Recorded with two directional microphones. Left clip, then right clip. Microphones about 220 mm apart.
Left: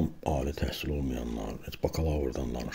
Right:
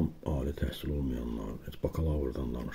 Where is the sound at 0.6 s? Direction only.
45° left (ahead or behind).